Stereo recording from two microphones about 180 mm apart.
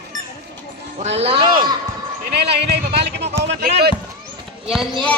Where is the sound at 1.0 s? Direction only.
35° right (ahead or behind).